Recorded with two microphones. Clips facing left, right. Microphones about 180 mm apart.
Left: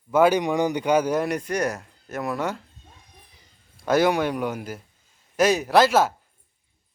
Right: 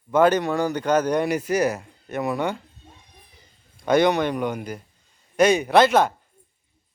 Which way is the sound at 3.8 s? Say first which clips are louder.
Right 1 dB; 5° left (ahead or behind).